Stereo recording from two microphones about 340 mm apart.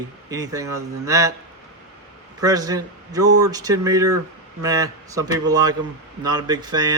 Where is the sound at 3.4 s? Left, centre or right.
Centre.